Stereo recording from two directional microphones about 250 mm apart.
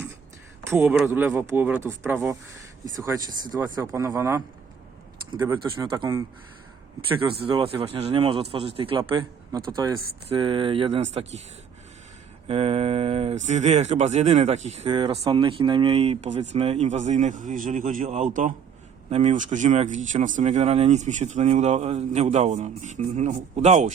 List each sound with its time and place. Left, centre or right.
0.7 s speech: centre; by 11.3 s right
12.5 s speech: right